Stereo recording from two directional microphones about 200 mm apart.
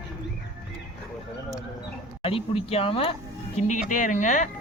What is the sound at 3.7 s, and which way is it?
Speech, 40° left (ahead or behind).